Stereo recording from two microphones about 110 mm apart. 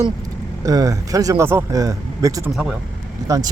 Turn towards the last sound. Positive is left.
turn(degrees=-30)  # may be behind; listen again after turning